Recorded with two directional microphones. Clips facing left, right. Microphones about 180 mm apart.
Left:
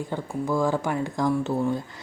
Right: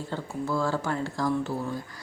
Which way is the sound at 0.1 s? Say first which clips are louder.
Left 2 dB; 15° left (ahead or behind).